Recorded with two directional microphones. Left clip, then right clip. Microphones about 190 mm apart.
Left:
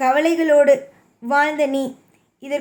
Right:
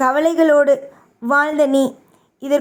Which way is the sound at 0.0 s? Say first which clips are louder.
Right 2 dB; 20° right (ahead or behind).